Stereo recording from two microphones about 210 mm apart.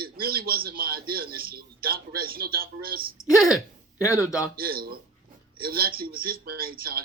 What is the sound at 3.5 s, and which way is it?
Hiccup, 15° left (ahead or behind).